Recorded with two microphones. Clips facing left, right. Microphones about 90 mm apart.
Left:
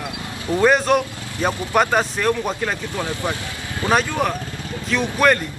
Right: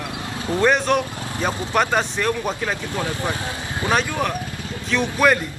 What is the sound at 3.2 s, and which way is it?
Speech, 20° right (ahead or behind).